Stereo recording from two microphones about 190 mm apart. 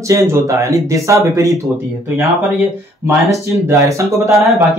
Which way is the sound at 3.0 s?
10° right (ahead or behind).